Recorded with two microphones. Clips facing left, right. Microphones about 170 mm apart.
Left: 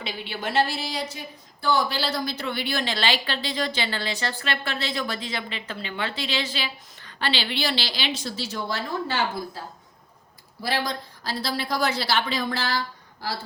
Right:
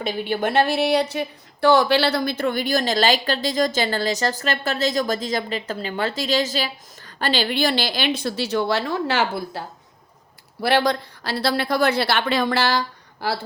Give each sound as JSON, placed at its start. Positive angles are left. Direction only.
{"t": 0.0, "sound": "a woman's voice", "side_deg": -50}